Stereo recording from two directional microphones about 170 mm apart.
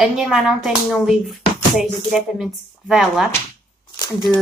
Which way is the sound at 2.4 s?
5° right (ahead or behind).